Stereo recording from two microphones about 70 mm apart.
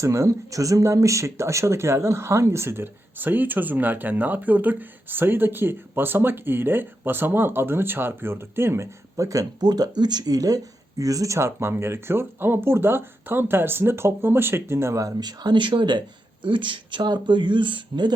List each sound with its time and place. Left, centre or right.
0.0 s speech: right
9.6 s speech: right
15.2 s speech: right